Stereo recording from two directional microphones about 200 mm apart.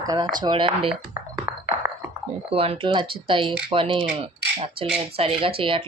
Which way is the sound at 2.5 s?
30° right (ahead or behind).